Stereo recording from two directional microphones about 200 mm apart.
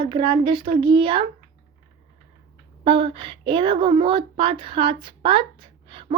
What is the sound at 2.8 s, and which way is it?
A child's voice, 25° right (ahead or behind).